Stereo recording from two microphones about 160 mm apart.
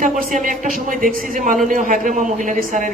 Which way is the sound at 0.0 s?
55° right (ahead or behind).